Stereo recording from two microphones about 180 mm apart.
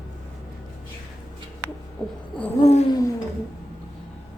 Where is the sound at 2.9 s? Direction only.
20° left (ahead or behind).